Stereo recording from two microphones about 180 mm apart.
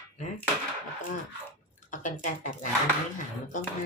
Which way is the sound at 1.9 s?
45° left (ahead or behind).